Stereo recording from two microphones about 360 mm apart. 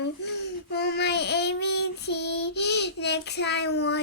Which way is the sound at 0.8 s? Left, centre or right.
Left.